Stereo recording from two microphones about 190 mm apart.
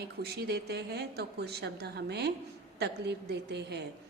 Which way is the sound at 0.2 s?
55° right (ahead or behind).